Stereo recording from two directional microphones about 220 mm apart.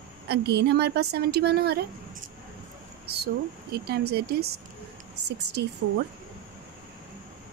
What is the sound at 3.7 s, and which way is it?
Speech, 45° right (ahead or behind).